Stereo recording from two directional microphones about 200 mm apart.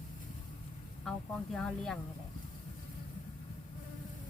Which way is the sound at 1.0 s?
Centre (ahead or behind).